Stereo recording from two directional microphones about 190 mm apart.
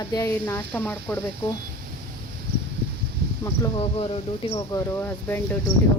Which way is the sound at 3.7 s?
30° left (ahead or behind).